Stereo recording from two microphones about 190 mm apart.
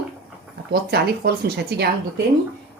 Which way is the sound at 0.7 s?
55° right (ahead or behind).